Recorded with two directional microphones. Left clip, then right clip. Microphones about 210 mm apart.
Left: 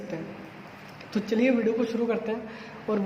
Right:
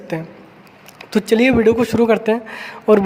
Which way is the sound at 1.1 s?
50° right (ahead or behind).